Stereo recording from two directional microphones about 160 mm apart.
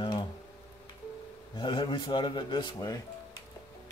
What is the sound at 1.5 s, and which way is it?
A man's voice, 30° left (ahead or behind).